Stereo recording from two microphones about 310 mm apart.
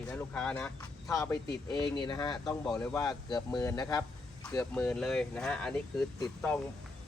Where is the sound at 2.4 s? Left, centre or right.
Centre.